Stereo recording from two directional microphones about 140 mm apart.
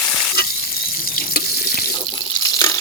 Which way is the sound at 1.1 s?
90° left.